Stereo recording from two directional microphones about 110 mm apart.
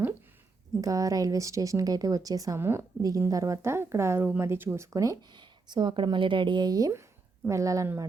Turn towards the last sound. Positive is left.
turn(degrees=-30)  # may be behind; listen again after turning